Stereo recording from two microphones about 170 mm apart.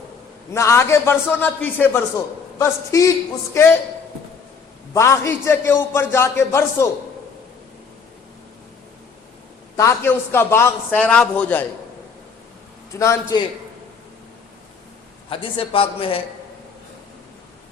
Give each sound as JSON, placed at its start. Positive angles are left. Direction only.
{"t": 0.5, "sound": "a man's voice", "side_deg": 15}
{"t": 4.9, "sound": "a man's voice", "side_deg": 15}
{"t": 9.7, "sound": "a man's voice", "side_deg": 15}
{"t": 13.0, "sound": "a man's voice", "side_deg": 20}
{"t": 15.3, "sound": "speech", "side_deg": 30}